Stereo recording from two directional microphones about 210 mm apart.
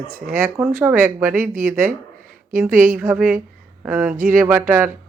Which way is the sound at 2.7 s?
40° right (ahead or behind).